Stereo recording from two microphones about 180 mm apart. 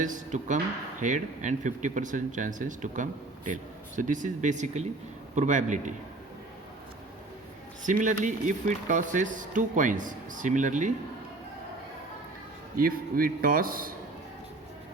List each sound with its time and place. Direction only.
0.0 s speech: 45° right (ahead or behind)
7.9 s speech: 45° right (ahead or behind)
12.7 s speech: 50° right (ahead or behind)